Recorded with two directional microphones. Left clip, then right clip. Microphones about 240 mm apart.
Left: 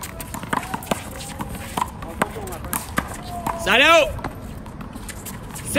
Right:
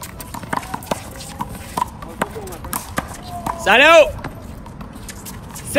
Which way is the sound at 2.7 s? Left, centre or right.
Centre.